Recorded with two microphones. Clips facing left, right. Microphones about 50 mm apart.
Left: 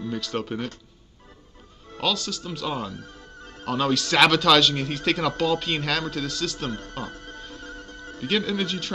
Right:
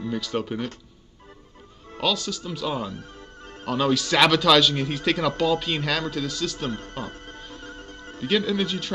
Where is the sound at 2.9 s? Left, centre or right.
Right.